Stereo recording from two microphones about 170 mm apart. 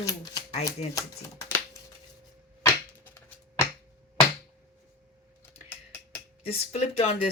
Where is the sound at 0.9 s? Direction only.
20° left (ahead or behind).